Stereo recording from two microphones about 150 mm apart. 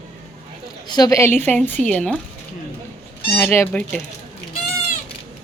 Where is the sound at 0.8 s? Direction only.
25° left (ahead or behind); by 2.2 s 10° left (ahead or behind).